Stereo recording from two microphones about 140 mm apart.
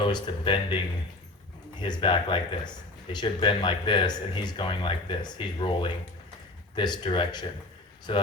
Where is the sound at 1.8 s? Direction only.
35° left (ahead or behind).